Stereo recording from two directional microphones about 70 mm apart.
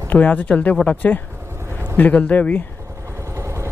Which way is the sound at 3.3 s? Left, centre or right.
Right.